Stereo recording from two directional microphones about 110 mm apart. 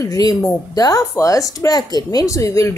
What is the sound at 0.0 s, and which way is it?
Speech, 35° left (ahead or behind).